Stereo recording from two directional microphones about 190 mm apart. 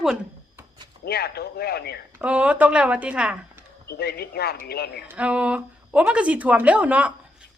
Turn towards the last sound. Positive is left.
turn(degrees=-5)  # may be behind; listen again after turning